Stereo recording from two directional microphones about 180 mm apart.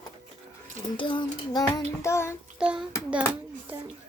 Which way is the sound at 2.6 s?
5° right (ahead or behind).